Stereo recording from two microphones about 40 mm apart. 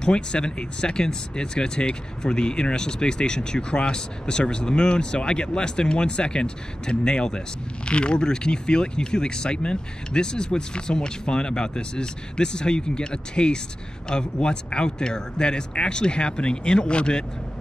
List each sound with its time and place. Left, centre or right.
0.0 s speech: left